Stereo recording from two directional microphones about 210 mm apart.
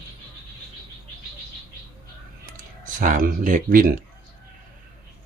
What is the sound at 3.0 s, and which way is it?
Speech, 40° right (ahead or behind).